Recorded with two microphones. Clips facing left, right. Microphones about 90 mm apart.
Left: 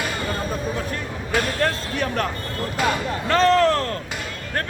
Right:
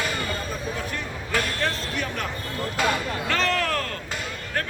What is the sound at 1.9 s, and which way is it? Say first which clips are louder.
Speech: left 5 dB; 45° left (ahead or behind).